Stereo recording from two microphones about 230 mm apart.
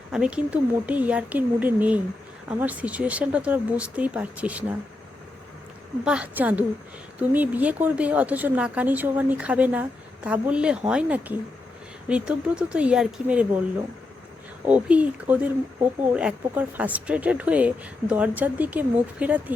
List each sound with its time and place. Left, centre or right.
0.1 s speech: centre
6.1 s speech: centre
14.7 s speech: centre